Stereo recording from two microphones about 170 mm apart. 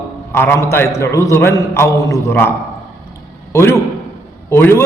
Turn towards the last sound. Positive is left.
turn(degrees=15)  # may be behind; listen again after turning